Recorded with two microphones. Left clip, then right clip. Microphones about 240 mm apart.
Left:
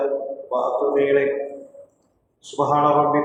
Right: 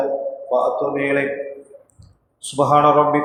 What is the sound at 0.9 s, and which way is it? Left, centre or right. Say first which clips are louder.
Speech: left 2 dB; right.